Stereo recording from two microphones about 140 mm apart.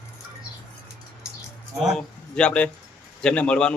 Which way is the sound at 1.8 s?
Centre (ahead or behind).